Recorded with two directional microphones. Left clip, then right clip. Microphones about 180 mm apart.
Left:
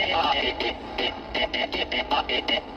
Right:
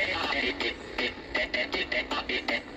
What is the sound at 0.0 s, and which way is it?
Radio, 40° left (ahead or behind).